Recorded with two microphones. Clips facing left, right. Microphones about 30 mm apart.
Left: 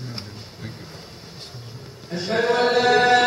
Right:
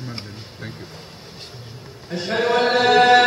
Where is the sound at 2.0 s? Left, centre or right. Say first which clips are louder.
Even; centre.